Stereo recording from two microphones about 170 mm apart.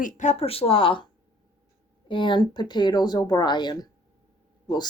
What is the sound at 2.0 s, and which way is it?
Speech, 30° left (ahead or behind).